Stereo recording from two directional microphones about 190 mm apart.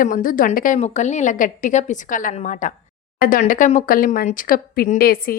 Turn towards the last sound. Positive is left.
turn(degrees=50)  # may be behind; listen again after turning